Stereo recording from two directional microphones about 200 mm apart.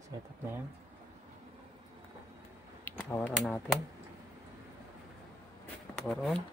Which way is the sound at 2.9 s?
10° left (ahead or behind).